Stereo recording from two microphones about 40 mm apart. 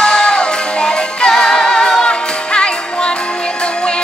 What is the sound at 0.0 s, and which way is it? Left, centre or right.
Music, left.